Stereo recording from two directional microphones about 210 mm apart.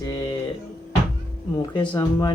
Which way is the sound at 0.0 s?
20° left (ahead or behind).